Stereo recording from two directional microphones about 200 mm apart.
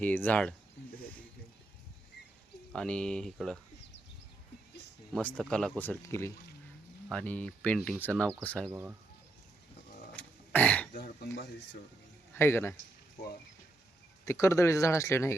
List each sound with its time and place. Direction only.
0.0 s speech: 10° left (ahead or behind)
2.7 s speech: 5° left (ahead or behind)
5.1 s speech: 5° left (ahead or behind)
8.7 s speech: 10° right (ahead or behind)
10.2 s throat clearing: 5° left (ahead or behind)
10.9 s speech: 50° left (ahead or behind)
12.3 s a man's voice: 10° left (ahead or behind)
14.3 s speech: 15° left (ahead or behind)